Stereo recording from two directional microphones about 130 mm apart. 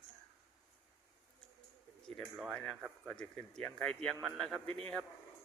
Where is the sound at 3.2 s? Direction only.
5° left (ahead or behind).